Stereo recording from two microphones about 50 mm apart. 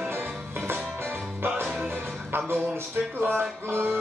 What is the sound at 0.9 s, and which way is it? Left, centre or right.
Music, right.